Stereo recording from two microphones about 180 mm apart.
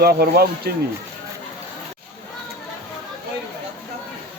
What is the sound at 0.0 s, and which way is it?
Speech, 60° right (ahead or behind).